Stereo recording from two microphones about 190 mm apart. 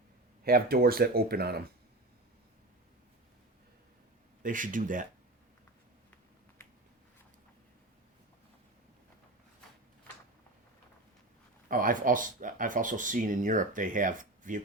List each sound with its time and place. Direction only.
0.4 s speech: 50° right (ahead or behind)
4.4 s speech: 45° right (ahead or behind)
11.7 s speech: 45° right (ahead or behind)